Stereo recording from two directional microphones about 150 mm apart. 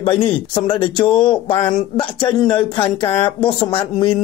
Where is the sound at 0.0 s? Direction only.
35° left (ahead or behind).